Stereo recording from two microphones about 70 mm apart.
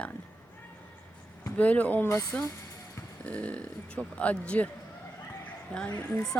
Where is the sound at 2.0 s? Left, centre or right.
Left.